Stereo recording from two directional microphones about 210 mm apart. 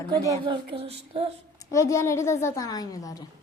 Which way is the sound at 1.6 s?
15° left (ahead or behind).